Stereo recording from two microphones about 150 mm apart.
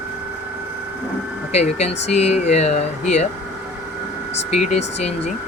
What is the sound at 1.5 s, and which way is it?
Speech, 45° left (ahead or behind).